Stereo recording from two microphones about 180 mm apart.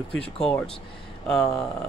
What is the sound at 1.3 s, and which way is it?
Speech, 5° left (ahead or behind).